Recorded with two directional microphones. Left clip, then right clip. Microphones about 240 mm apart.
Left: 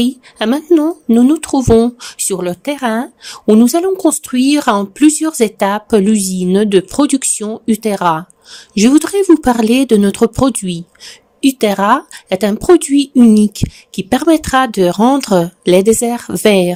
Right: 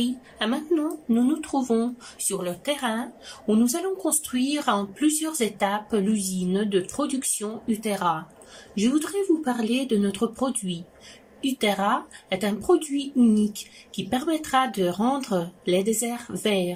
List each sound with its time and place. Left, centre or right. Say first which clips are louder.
0.0 s speech: left 11 dB; left